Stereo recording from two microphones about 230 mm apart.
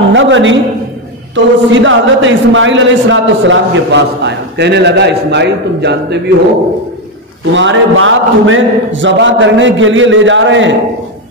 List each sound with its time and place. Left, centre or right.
0.1 s a sound: right
1.3 s a man's voice: right
7.5 s a man's voice: right